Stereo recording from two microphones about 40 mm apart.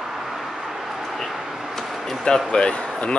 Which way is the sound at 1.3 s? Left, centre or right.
Centre.